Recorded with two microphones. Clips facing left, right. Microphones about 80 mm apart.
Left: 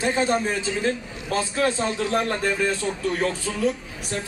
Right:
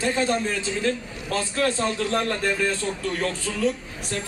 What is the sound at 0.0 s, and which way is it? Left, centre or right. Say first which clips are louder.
A man's voice: left 1 dB; centre.